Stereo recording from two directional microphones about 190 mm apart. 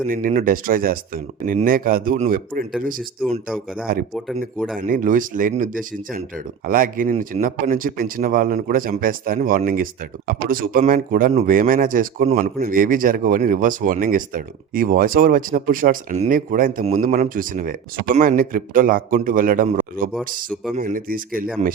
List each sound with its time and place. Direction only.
0.1 s speech: 45° right (ahead or behind)
3.9 s speech: 50° right (ahead or behind)